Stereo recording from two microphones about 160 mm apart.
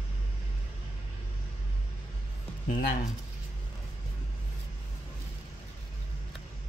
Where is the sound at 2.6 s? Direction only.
55° left (ahead or behind).